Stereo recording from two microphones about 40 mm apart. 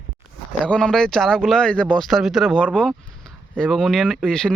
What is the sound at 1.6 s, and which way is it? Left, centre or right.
Speech, left.